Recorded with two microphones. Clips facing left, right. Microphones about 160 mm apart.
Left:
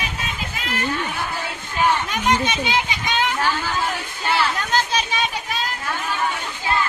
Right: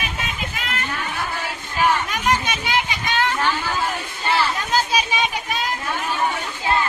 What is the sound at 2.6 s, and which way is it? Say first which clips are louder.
Children playing: even; 20° left (ahead or behind).